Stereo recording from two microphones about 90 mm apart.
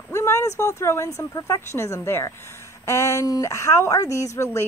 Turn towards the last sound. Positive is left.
turn(degrees=35)  # may be behind; listen again after turning